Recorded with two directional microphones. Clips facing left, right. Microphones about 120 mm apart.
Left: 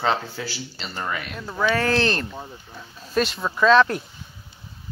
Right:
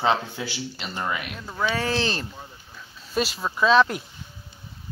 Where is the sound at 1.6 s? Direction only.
5° right (ahead or behind).